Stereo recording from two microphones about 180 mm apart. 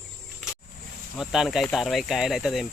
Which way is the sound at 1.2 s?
5° right (ahead or behind).